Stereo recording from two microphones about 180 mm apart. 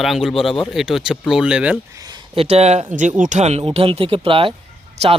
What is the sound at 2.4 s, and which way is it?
Speech, 35° right (ahead or behind).